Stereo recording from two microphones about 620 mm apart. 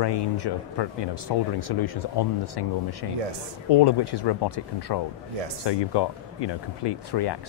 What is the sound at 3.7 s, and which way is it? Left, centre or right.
Speech, left.